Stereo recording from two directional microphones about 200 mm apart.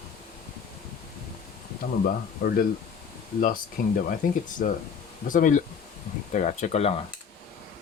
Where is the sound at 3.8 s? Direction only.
50° left (ahead or behind); by 7.0 s 30° left (ahead or behind).